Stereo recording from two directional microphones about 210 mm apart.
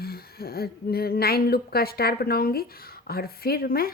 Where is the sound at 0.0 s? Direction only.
45° left (ahead or behind).